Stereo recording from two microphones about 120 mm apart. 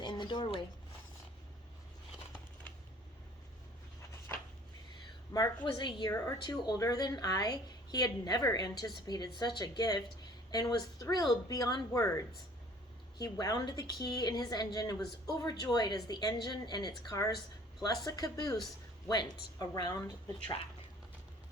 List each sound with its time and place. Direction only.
0.0 s zipper: 40° left (ahead or behind)
4.3 s a sound: 20° left (ahead or behind)
5.3 s a woman's voice: 35° left (ahead or behind)
13.3 s a woman's voice: 30° left (ahead or behind)